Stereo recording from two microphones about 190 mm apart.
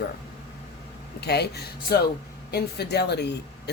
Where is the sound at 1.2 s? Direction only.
60° left (ahead or behind).